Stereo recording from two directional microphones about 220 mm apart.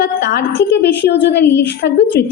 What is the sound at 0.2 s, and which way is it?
A woman's voice, 55° left (ahead or behind).